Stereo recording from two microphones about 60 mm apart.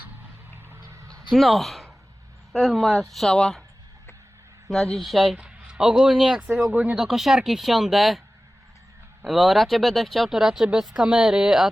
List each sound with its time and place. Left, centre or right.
0.8 s a sound: right
1.3 s speech: centre
4.7 s speech: centre
5.4 s speech: centre
6.7 s speech: right
6.9 s a woman's voice: centre
9.2 s a woman's voice: centre
11.0 s a woman's voice: centre